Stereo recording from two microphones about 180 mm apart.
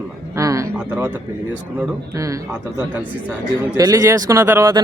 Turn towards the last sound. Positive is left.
turn(degrees=-15)  # may be behind; listen again after turning